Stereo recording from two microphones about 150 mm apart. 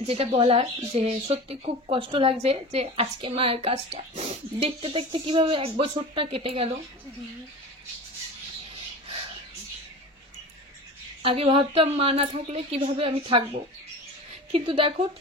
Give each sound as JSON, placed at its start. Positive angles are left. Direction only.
{"t": 0.0, "sound": "speech", "side_deg": -40}
{"t": 11.2, "sound": "speech", "side_deg": -40}